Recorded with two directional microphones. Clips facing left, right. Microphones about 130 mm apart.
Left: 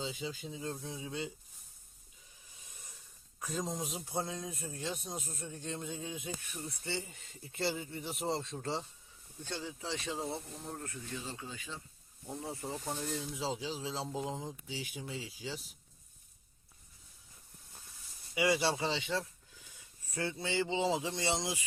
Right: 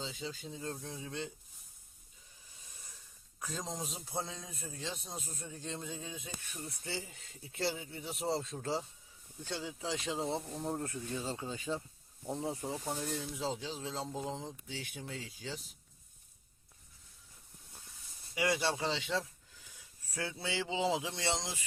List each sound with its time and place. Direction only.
0.0 s speech: 10° left (ahead or behind)
3.4 s speech: 5° left (ahead or behind)
5.9 s speech: 25° left (ahead or behind)
6.7 s speech: centre (ahead or behind)
10.2 s speech: 25° right (ahead or behind)
12.6 s speech: 10° right (ahead or behind); by 15.6 s 10° left (ahead or behind)
18.3 s speech: 5° left (ahead or behind)